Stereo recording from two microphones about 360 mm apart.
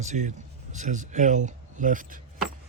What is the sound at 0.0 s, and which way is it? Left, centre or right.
Speech, centre.